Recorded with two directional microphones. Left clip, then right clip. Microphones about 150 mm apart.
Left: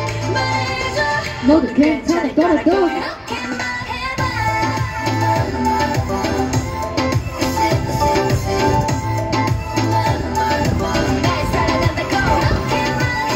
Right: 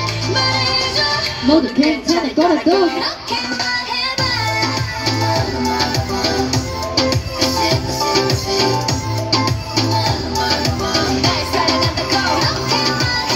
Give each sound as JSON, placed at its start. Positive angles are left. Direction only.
{"t": 0.3, "sound": "music", "side_deg": 25}
{"t": 1.5, "sound": "speech", "side_deg": 20}
{"t": 4.2, "sound": "music", "side_deg": 20}